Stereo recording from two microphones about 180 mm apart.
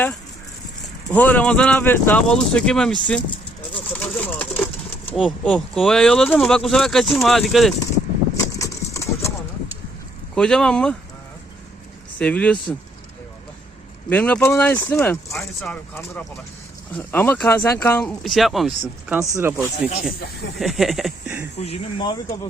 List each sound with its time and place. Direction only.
1.1 s speech: 5° left (ahead or behind)
3.9 s a sound: 10° left (ahead or behind)
5.1 s speech: 5° left (ahead or behind)
8.5 s clip-clop: 15° left (ahead or behind)
10.3 s speech: 5° left (ahead or behind)
12.2 s speech: 5° left (ahead or behind)
14.1 s speech: 10° left (ahead or behind)
17.0 s speech: 10° left (ahead or behind)
18.2 s speech: centre (ahead or behind)
19.3 s speech: 15° right (ahead or behind)
20.6 s speech: centre (ahead or behind)
21.6 s speech: 35° left (ahead or behind)